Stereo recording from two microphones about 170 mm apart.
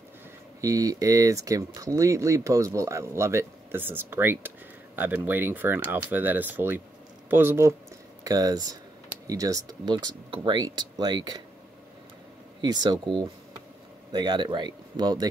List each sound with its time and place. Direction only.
0.6 s speech: 20° right (ahead or behind)
12.6 s speech: 25° right (ahead or behind)